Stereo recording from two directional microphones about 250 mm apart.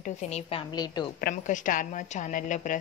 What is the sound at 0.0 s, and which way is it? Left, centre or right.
A woman's voice, left.